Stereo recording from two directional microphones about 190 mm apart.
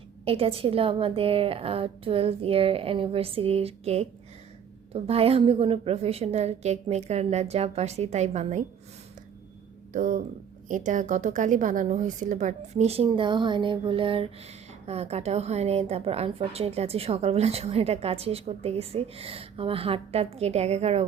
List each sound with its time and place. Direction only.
0.3 s a woman's voice: 30° right (ahead or behind)
9.9 s a woman's voice: 45° right (ahead or behind)